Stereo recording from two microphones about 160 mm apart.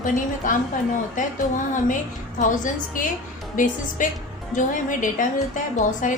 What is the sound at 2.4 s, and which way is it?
A woman's voice, 55° left (ahead or behind).